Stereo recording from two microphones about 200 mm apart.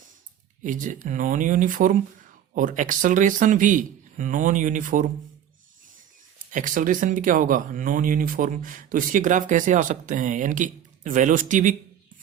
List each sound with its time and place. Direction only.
0.6 s speech: 40° right (ahead or behind)
6.5 s speech: 40° right (ahead or behind)